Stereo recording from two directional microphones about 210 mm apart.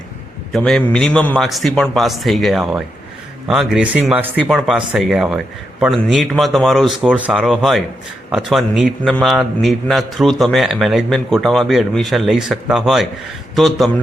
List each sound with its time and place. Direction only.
0.5 s a man's voice: 5° left (ahead or behind)